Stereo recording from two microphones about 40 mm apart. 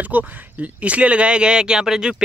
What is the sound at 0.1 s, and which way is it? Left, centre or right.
Speech, right.